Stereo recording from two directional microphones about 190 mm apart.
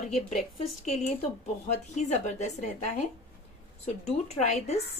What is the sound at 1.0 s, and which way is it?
Speech, 40° left (ahead or behind).